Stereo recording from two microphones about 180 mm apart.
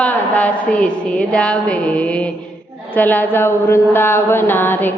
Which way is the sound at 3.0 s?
10° left (ahead or behind).